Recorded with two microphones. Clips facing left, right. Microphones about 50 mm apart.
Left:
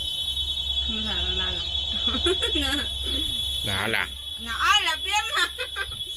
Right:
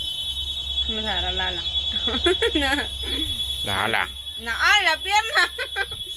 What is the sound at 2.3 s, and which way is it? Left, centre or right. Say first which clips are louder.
Speech: right 6 dB; right.